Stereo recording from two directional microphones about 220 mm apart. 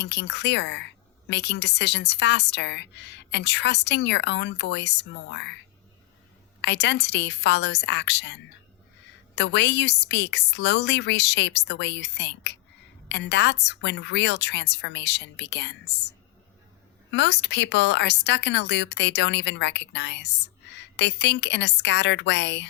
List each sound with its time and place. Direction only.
0.0 s speech: 50° left (ahead or behind)
6.6 s speech: 50° left (ahead or behind)